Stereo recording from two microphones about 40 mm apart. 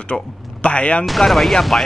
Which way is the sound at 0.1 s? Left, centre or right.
Left.